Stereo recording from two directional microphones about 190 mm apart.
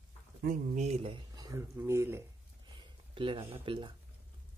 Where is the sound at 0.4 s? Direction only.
40° right (ahead or behind); by 3.9 s 25° right (ahead or behind).